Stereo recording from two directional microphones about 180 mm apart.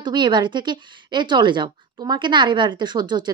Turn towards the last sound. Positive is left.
turn(degrees=-25)  # may be behind; listen again after turning